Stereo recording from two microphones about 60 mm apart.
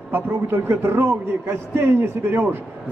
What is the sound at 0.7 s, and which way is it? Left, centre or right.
A man's voice, right.